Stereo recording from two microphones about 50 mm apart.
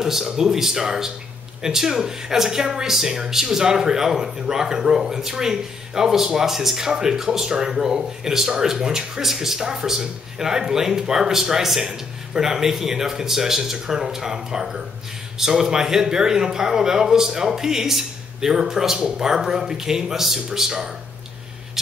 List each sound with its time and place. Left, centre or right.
0.0 s speech: centre